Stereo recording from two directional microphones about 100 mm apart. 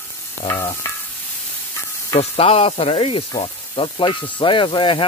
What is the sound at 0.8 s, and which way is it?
Stir, 25° left (ahead or behind).